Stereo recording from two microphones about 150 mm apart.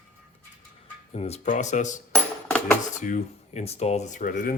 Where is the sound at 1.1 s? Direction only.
45° left (ahead or behind).